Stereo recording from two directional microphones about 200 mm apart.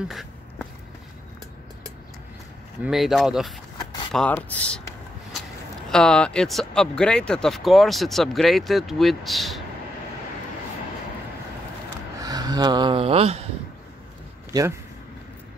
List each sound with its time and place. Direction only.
2.8 s speech: centre (ahead or behind)
3.7 s zipper: 20° left (ahead or behind)
4.1 s speech: 5° left (ahead or behind)
5.9 s speech: 5° left (ahead or behind)
12.2 s speech: 20° right (ahead or behind)